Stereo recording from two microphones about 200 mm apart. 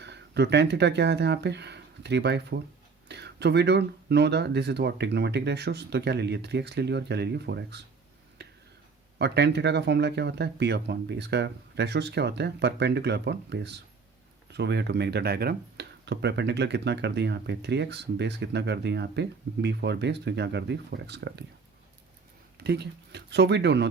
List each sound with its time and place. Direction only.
0.0 s speech: 55° right (ahead or behind)
8.4 s a sound: 55° right (ahead or behind)
9.1 s speech: 55° right (ahead or behind)
22.6 s speech: 55° right (ahead or behind)